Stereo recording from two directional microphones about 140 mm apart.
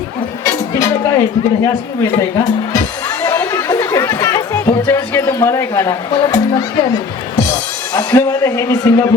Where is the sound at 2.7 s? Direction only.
25° left (ahead or behind).